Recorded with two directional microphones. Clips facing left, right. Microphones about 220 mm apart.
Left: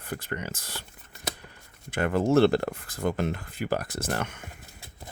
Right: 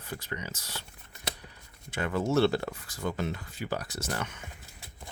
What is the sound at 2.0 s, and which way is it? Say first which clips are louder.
Speech: left 5 dB; 50° left (ahead or behind).